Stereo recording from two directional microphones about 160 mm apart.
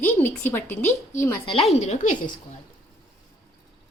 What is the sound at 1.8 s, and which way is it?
Speech, 50° left (ahead or behind).